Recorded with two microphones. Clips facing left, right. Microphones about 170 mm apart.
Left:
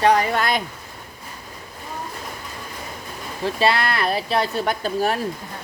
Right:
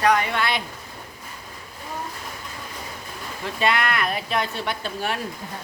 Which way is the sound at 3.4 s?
35° left (ahead or behind).